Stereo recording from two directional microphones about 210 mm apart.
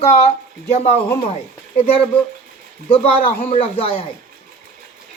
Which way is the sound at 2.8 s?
25° left (ahead or behind).